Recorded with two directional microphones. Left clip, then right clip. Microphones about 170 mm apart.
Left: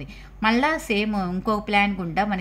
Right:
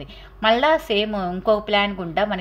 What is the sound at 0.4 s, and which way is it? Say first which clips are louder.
A woman's voice: right 4 dB; 30° left (ahead or behind).